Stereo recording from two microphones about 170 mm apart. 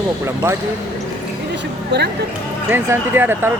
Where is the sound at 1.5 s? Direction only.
85° right.